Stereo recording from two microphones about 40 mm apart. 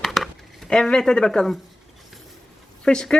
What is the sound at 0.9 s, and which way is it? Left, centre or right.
Speech, centre.